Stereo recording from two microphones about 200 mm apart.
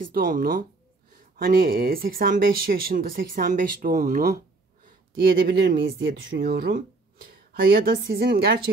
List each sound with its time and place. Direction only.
0.0 s speech: 45° right (ahead or behind)